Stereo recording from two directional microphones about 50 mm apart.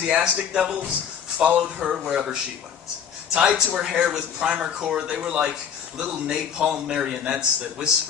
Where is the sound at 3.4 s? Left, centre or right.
Centre.